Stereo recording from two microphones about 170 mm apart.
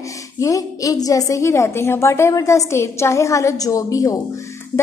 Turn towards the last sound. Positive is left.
turn(degrees=20)  # may be behind; listen again after turning